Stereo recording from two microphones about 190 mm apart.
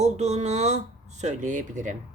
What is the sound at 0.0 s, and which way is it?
A woman's voice, 35° right (ahead or behind).